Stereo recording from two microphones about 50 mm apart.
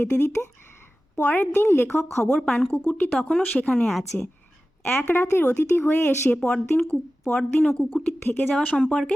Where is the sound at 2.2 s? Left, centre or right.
Centre.